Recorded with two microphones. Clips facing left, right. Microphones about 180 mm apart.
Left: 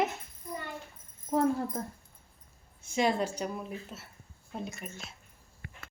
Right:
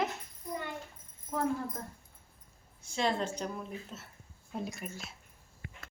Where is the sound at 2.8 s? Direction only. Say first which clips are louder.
Left 3 dB; 15° left (ahead or behind); by 5.1 s centre (ahead or behind).